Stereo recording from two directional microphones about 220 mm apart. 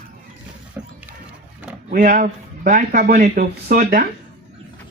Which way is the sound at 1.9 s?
35° right (ahead or behind).